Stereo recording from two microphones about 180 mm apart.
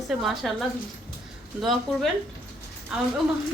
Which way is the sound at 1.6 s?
Centre (ahead or behind).